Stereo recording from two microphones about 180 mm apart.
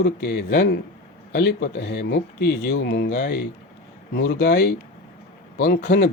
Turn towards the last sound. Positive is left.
turn(degrees=60)  # may be behind; listen again after turning